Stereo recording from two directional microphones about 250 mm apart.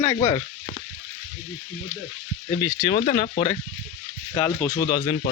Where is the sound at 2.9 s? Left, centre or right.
Left.